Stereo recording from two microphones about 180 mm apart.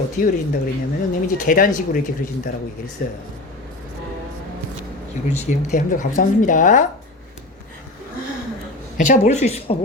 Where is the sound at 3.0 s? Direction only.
50° left (ahead or behind).